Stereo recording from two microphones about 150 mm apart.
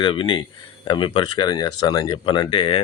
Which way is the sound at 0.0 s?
35° left (ahead or behind).